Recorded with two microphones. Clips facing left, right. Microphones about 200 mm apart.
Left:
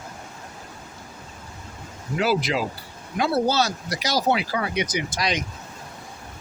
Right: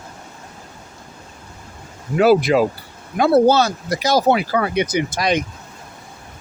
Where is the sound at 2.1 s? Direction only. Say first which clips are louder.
Right 9 dB; 55° right (ahead or behind).